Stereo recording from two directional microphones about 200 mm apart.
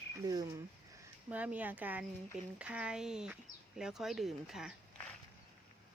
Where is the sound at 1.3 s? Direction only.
5° right (ahead or behind).